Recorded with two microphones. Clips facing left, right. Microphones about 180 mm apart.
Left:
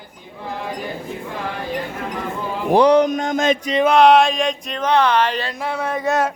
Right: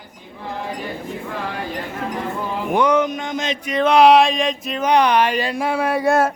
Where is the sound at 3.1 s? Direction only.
45° left (ahead or behind).